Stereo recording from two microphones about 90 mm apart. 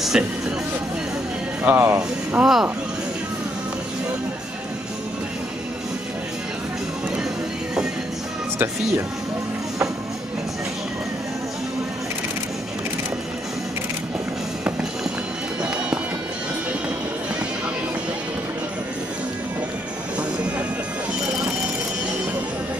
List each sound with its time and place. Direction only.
0.1 s speech: 5° right (ahead or behind)
1.6 s speech: 25° right (ahead or behind)
2.4 s speech: 5° right (ahead or behind)